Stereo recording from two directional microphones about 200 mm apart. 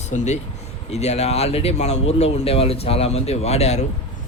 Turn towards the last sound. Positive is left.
turn(degrees=30)  # may be behind; listen again after turning